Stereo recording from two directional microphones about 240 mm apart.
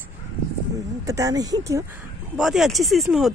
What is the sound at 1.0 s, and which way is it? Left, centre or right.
Speech, centre.